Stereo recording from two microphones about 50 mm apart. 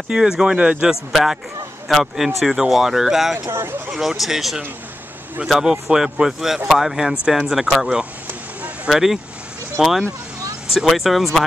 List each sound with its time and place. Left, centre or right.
0.1 s a man's voice: centre
1.1 s speech: centre
3.4 s speech: right
3.9 s speech: centre